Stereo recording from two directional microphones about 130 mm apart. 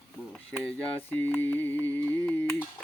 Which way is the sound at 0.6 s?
10° left (ahead or behind).